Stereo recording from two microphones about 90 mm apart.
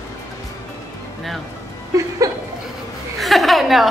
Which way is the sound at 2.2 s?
40° right (ahead or behind).